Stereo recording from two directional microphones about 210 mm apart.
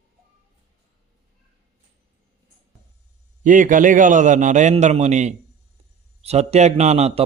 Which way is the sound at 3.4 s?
40° right (ahead or behind).